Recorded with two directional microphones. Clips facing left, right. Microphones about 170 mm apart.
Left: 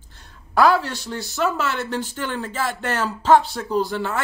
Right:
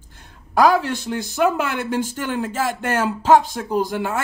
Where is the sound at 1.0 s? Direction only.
15° right (ahead or behind).